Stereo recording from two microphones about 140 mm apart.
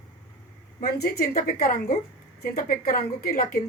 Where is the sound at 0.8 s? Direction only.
90° left.